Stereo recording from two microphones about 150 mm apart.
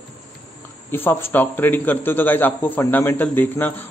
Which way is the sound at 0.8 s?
15° left (ahead or behind).